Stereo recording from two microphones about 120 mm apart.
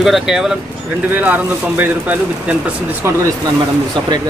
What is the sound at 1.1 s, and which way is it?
Speech, 15° right (ahead or behind).